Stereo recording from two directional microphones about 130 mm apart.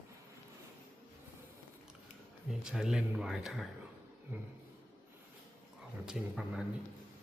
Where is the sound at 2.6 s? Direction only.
5° right (ahead or behind).